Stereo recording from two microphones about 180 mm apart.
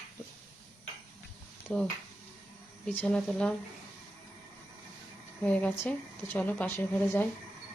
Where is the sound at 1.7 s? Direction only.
5° left (ahead or behind).